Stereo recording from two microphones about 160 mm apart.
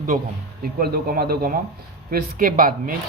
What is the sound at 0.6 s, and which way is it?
A man's voice, 70° right (ahead or behind).